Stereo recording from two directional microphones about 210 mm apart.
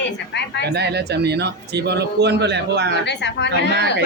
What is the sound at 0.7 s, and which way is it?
A man's voice, 50° right (ahead or behind).